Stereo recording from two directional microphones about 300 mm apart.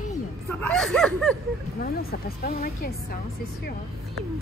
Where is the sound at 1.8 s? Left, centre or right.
Left.